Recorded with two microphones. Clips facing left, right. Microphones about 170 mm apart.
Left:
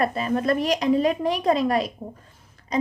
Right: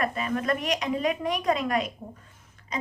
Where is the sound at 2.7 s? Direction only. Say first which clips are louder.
Left 9 dB; 35° left (ahead or behind).